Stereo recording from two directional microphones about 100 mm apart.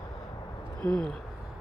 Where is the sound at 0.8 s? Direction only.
15° left (ahead or behind).